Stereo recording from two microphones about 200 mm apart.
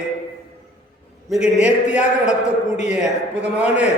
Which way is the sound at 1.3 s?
5° right (ahead or behind).